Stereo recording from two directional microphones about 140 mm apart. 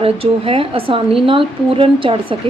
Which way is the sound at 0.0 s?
40° right (ahead or behind).